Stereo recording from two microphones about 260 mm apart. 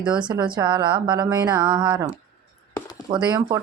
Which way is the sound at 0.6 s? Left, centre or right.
Centre.